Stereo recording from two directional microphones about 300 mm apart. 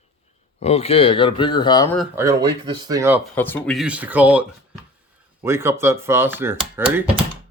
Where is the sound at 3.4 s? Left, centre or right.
Centre.